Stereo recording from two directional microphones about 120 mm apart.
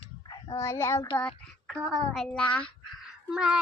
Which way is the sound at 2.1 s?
10° left (ahead or behind).